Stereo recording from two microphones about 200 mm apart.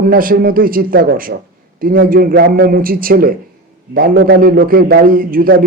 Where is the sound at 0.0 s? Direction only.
45° right (ahead or behind).